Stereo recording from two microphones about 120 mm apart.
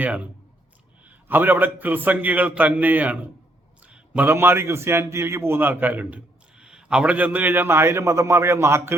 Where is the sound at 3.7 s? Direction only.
10° right (ahead or behind).